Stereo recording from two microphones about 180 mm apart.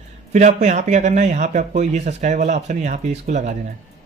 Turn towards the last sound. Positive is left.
turn(degrees=-40)  # may be behind; listen again after turning